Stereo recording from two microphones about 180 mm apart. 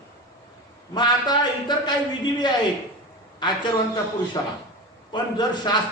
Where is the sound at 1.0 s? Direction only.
25° left (ahead or behind).